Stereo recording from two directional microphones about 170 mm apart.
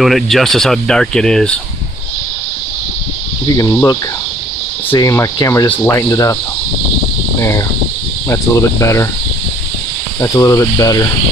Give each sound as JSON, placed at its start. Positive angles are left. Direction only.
{"t": 0.0, "sound": "speech", "side_deg": 0}
{"t": 3.5, "sound": "speech", "side_deg": 20}
{"t": 7.3, "sound": "speech", "side_deg": 15}
{"t": 10.2, "sound": "speech", "side_deg": 20}